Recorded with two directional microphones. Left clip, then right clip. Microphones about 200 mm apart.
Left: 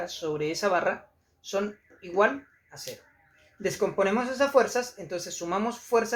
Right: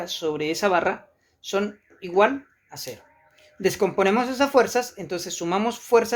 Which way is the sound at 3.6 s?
50° right (ahead or behind).